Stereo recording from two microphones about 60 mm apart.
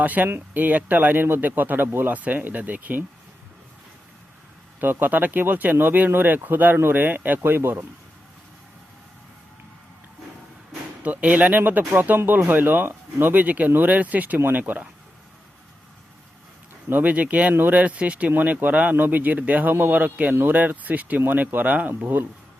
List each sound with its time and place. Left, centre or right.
0.0 s speech: right
4.8 s speech: right
11.0 s speech: right
14.4 s speech: right
16.9 s speech: right